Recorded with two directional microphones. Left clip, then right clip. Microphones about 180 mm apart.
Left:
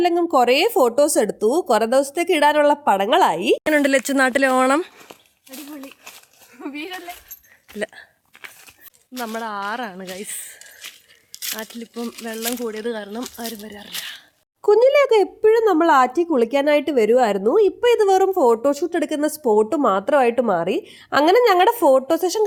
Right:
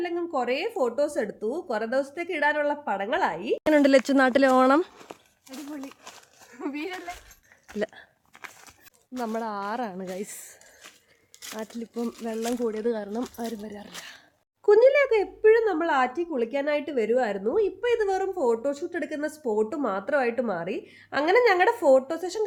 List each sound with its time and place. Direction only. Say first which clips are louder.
0.0 s speech: left 12 dB; 45° left (ahead or behind)
3.6 s speech: left 2 dB; centre (ahead or behind)
7.8 s a sound: left 3 dB; 5° right (ahead or behind)
9.1 s a woman's voice: left 4 dB; 10° left (ahead or behind)
11.3 s a sound: left 12 dB; 15° right (ahead or behind)
11.8 s speech: left 2 dB; centre (ahead or behind)
12.2 s a woman's voice: left 2 dB; 10° left (ahead or behind)
14.6 s a woman's voice: left 4 dB; 40° left (ahead or behind)